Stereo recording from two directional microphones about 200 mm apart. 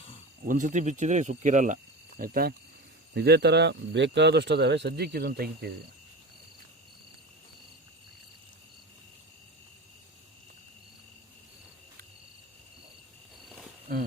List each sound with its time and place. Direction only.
0.4 s speech: 40° right (ahead or behind)